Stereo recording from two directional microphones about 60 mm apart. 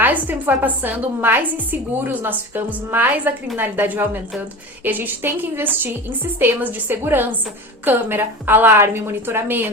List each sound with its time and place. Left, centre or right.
0.0 s a woman's voice: right